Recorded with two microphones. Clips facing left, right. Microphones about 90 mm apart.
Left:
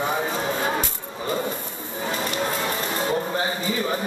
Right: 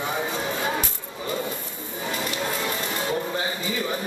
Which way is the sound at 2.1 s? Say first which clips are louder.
Left 2 dB; 35° left (ahead or behind).